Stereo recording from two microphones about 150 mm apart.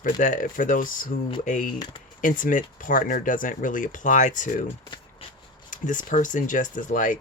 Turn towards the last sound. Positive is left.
turn(degrees=60)  # may be behind; listen again after turning